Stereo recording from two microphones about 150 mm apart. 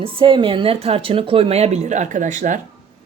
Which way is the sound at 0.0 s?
35° right (ahead or behind).